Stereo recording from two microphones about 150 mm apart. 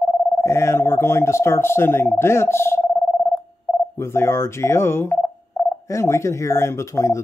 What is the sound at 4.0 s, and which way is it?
Speech, 15° left (ahead or behind).